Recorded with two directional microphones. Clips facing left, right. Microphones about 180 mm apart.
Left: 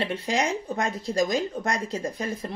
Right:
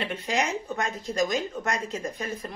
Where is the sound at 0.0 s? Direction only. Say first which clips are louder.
Left 2 dB; 30° left (ahead or behind).